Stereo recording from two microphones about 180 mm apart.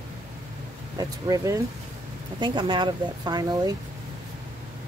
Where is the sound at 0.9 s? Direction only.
20° right (ahead or behind).